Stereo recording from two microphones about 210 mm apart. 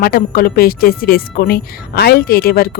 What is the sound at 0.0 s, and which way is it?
Speech, 45° left (ahead or behind).